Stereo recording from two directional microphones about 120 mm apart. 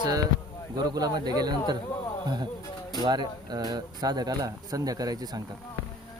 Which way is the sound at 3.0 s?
35° right (ahead or behind).